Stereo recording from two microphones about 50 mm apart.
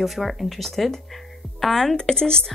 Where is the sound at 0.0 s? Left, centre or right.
Centre.